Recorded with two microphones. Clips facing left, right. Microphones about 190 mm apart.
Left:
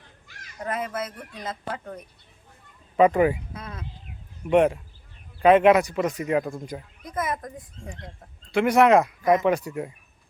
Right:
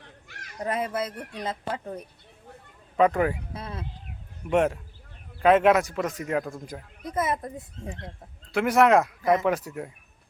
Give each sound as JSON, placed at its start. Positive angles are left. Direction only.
{"t": 0.0, "sound": "a sound", "side_deg": -65}
{"t": 0.6, "sound": "speech", "side_deg": -30}
{"t": 3.0, "sound": "speech", "side_deg": 5}
{"t": 3.5, "sound": "speech", "side_deg": -30}
{"t": 4.4, "sound": "speech", "side_deg": 0}
{"t": 7.0, "sound": "speech", "side_deg": -25}
{"t": 8.5, "sound": "speech", "side_deg": 0}